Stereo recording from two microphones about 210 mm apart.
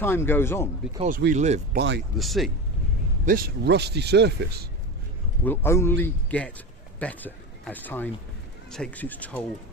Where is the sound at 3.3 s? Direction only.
45° right (ahead or behind).